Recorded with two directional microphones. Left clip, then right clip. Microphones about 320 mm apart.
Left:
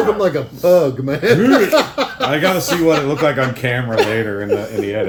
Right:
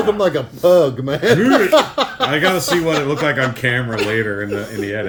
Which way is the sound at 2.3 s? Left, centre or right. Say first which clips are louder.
Even; centre.